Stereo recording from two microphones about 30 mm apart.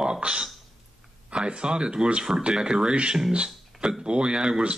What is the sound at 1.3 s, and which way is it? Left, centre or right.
Speech, right.